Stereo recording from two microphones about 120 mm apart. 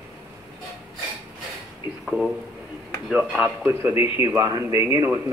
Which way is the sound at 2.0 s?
Centre (ahead or behind).